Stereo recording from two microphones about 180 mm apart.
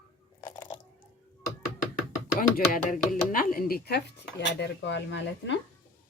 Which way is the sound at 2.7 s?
50° left (ahead or behind).